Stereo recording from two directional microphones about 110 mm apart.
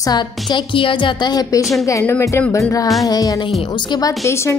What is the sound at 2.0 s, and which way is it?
A woman's voice, 20° left (ahead or behind).